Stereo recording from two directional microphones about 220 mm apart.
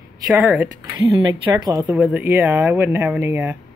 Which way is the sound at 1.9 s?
5° right (ahead or behind).